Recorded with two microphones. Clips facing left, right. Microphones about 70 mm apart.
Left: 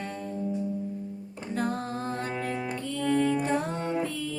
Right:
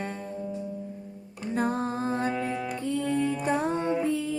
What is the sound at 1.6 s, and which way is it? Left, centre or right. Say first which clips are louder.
Music: right 3 dB; right.